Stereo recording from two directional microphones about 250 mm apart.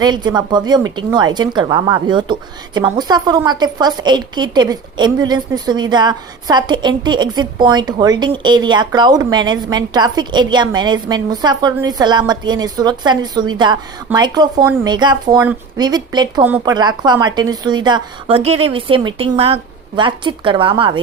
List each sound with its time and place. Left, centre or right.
0.0 s a woman's voice: centre